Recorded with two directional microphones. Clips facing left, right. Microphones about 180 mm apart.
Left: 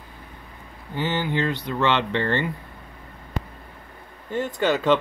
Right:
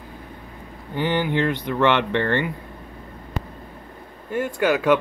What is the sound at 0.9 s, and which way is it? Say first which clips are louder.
Speech: right 3 dB; 15° right (ahead or behind).